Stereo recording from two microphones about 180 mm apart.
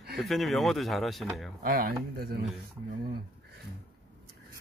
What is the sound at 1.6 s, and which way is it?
Speech, 55° right (ahead or behind).